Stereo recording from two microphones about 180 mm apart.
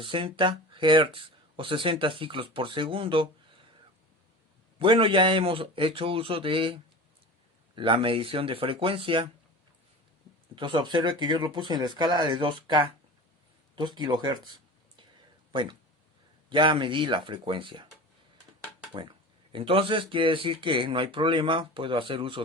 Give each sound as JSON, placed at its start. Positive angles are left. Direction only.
{"t": 0.0, "sound": "speech", "side_deg": -30}
{"t": 4.8, "sound": "speech", "side_deg": -30}
{"t": 7.8, "sound": "speech", "side_deg": -30}
{"t": 10.5, "sound": "speech", "side_deg": -25}
{"t": 19.0, "sound": "speech", "side_deg": -25}